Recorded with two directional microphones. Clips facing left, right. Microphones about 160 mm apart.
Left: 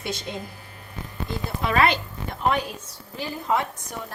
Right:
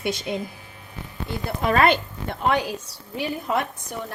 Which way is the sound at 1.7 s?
50° right (ahead or behind).